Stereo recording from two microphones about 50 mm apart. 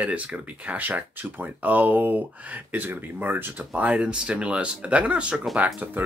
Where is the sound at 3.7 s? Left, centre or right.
Right.